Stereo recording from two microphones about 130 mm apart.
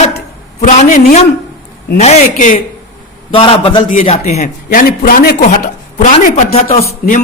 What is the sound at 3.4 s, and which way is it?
Speech, 40° left (ahead or behind).